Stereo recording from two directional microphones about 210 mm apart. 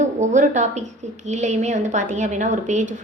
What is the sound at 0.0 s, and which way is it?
A woman's voice, 35° right (ahead or behind).